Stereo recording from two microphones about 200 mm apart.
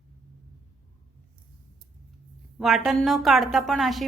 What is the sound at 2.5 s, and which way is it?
A woman's voice, centre (ahead or behind).